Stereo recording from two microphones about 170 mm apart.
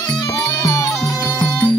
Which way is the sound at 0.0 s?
20° left (ahead or behind).